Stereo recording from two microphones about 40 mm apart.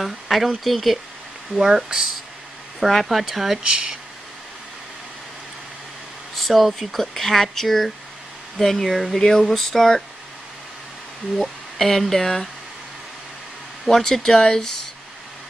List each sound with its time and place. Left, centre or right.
0.0 s speech: centre
1.6 s speech: centre
2.8 s speech: centre
3.6 s speech: right
6.3 s speech: centre
11.3 s speech: centre
13.8 s speech: centre